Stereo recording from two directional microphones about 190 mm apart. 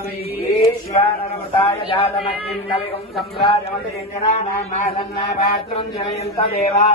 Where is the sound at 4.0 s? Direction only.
30° left (ahead or behind).